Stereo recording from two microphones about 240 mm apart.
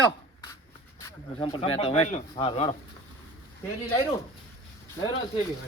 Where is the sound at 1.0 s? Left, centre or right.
Centre.